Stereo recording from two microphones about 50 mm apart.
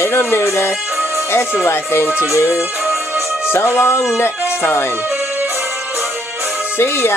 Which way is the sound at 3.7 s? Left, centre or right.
Left.